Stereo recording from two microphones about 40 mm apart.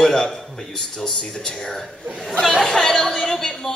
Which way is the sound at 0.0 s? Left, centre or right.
Centre.